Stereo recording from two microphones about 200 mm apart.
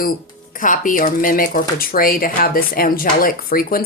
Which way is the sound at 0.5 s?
40° left (ahead or behind).